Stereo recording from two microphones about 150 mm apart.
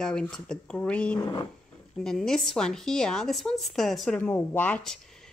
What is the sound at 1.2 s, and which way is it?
Speech, 25° left (ahead or behind).